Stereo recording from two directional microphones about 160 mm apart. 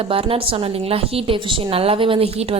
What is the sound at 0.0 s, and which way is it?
A woman's voice, 35° right (ahead or behind).